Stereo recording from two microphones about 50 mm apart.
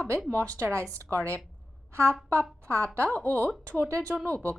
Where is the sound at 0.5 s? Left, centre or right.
Right.